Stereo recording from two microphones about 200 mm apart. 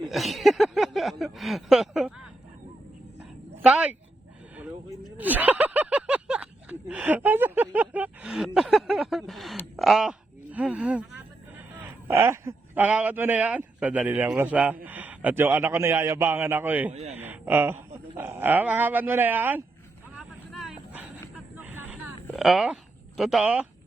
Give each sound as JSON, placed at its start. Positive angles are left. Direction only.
{"t": 0.1, "sound": "speech", "side_deg": 0}
{"t": 3.6, "sound": "a sound", "side_deg": -5}
{"t": 9.7, "sound": "a man's voice", "side_deg": 0}
{"t": 16.9, "sound": "a man's voice", "side_deg": -35}
{"t": 17.2, "sound": "speech", "side_deg": -10}
{"t": 20.1, "sound": "vehicle", "side_deg": 0}
{"t": 21.6, "sound": "a sound", "side_deg": -10}